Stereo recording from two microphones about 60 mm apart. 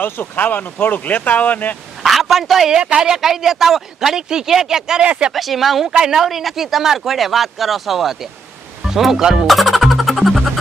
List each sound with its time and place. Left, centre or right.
0.0 s speech: left
2.0 s a man's voice: centre